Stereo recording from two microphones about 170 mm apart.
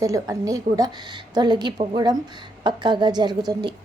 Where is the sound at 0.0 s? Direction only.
20° right (ahead or behind).